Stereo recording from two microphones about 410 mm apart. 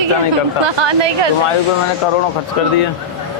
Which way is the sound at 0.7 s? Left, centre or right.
Right.